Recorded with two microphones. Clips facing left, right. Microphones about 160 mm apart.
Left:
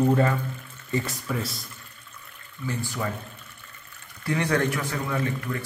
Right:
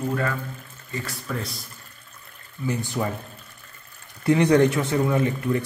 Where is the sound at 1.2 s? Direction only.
Centre (ahead or behind).